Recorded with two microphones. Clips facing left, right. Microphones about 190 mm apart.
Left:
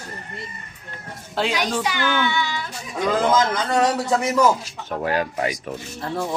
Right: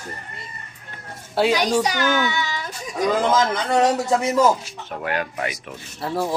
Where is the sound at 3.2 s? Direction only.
20° right (ahead or behind).